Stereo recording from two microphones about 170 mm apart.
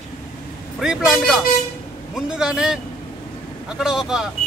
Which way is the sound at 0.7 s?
Centre (ahead or behind).